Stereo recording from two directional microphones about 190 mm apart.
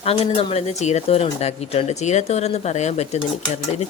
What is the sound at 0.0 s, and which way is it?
Speech, 30° left (ahead or behind).